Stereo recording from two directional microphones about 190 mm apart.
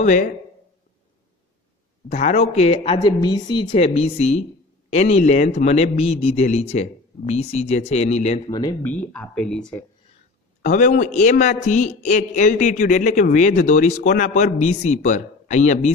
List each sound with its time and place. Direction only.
0.0 s a woman's voice: 40° left (ahead or behind)
2.0 s a woman's voice: 40° left (ahead or behind)
8.5 s speech: 20° left (ahead or behind)
8.9 s speech: 5° left (ahead or behind)
10.6 s a woman's voice: 40° left (ahead or behind)